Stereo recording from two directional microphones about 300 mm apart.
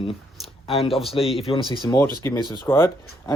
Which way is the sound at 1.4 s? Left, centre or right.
Centre.